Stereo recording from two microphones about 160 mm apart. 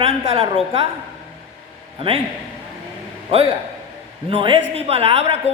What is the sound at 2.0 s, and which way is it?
Speech, 35° right (ahead or behind).